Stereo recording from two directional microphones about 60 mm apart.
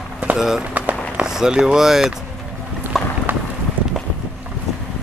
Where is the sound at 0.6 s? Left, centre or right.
Right.